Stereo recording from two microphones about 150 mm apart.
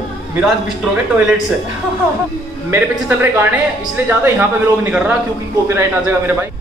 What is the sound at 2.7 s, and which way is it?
Speech, 10° right (ahead or behind).